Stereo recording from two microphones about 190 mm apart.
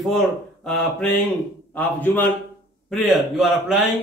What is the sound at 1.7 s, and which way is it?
A man's voice, 10° left (ahead or behind).